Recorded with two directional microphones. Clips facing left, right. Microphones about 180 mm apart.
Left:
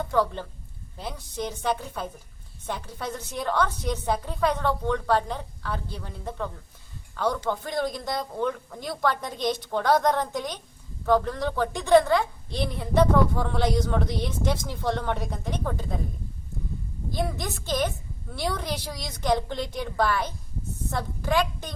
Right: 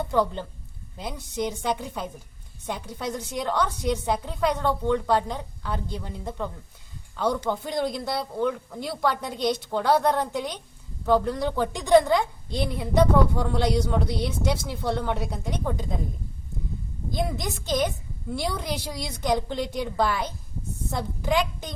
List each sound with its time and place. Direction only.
0.0 s a woman's voice: 15° right (ahead or behind)
17.2 s a woman's voice: 15° right (ahead or behind)